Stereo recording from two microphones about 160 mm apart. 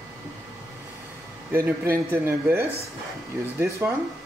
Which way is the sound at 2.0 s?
10° right (ahead or behind).